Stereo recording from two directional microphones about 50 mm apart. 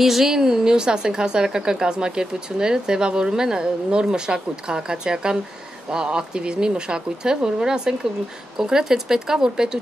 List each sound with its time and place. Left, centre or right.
0.0 s a woman's voice: centre